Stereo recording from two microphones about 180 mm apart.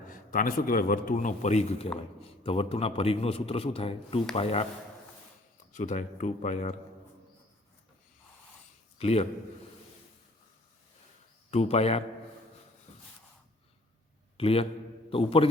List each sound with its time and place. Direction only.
0.1 s a man's voice: 50° left (ahead or behind); by 4.6 s 30° left (ahead or behind)
5.7 s speech: 45° left (ahead or behind)
9.0 s a man's voice: 35° left (ahead or behind)
11.5 s a man's voice: 35° left (ahead or behind)
14.3 s a man's voice: 30° left (ahead or behind)